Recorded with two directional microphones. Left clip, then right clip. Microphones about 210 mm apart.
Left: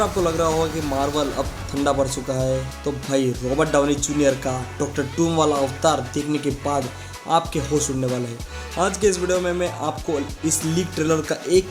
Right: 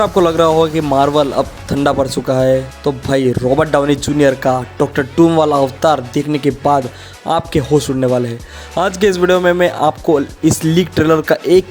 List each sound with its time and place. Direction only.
0.0 s speech: 40° right (ahead or behind)